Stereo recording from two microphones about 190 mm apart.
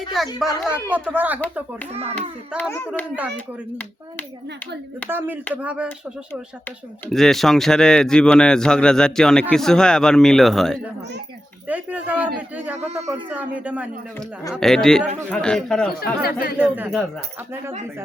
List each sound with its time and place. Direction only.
0.1 s speech: centre (ahead or behind)
2.6 s speech: 10° left (ahead or behind)
5.0 s speech: 10° right (ahead or behind)
7.1 s speech: centre (ahead or behind)
16.0 s speech: 55° left (ahead or behind)
16.6 s speech: 10° right (ahead or behind)